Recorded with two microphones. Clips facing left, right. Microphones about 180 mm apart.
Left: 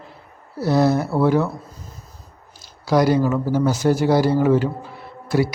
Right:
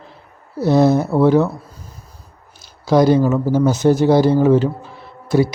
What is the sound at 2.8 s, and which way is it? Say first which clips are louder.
Speech: right 4 dB; 25° right (ahead or behind).